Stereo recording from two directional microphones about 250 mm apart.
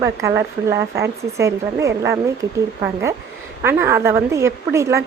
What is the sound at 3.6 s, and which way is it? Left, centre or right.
Speech, centre.